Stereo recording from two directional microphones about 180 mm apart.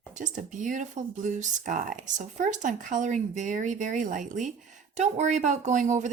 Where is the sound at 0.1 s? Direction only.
45° right (ahead or behind).